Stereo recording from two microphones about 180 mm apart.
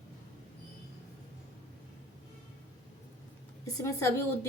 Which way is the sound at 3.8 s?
15° left (ahead or behind).